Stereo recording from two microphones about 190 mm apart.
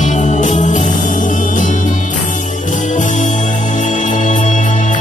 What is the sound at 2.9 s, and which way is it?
Music, 40° left (ahead or behind).